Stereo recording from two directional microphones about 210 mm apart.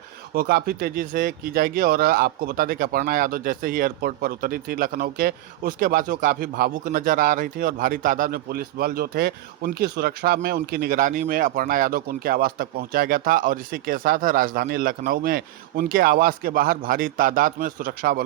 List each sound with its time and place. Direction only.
0.3 s speech: 45° right (ahead or behind)